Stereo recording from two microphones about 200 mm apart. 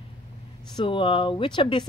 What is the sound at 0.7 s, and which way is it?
Speech, 25° left (ahead or behind).